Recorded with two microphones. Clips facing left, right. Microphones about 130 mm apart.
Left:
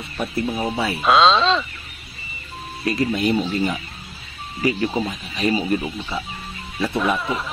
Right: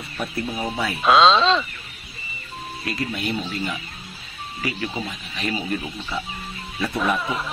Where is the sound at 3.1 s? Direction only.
40° left (ahead or behind).